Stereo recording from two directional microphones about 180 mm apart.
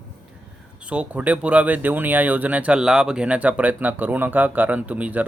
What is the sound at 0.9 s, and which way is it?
Speech, 5° right (ahead or behind).